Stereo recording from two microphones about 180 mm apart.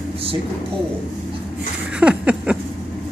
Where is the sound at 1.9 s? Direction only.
5° right (ahead or behind).